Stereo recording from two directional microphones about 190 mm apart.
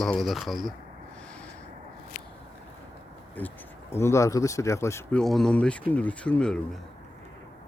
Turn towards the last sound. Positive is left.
turn(degrees=5)  # may be behind; listen again after turning